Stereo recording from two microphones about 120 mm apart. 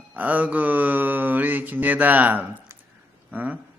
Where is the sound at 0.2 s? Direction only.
15° right (ahead or behind).